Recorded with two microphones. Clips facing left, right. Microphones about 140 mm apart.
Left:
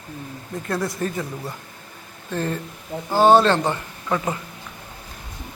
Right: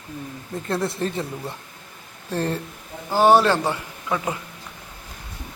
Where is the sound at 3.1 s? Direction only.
15° left (ahead or behind).